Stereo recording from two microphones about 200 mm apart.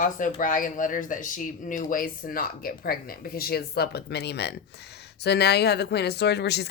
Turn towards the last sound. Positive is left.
turn(degrees=55)  # may be behind; listen again after turning